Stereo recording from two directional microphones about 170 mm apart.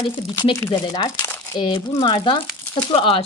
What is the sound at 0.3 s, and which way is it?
Speech, 20° left (ahead or behind).